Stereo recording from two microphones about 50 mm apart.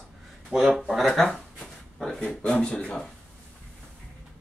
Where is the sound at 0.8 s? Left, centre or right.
Centre.